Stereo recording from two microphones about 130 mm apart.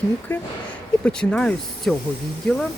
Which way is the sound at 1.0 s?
5° left (ahead or behind).